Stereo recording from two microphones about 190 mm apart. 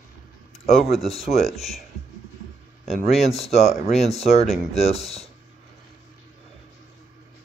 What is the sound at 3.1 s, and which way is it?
Speech, 35° left (ahead or behind).